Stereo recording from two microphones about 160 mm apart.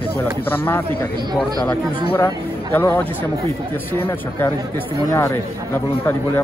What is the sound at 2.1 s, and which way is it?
Speech, 15° left (ahead or behind).